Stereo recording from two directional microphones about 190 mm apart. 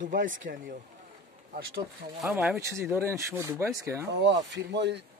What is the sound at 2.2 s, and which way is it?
Speech, 5° right (ahead or behind).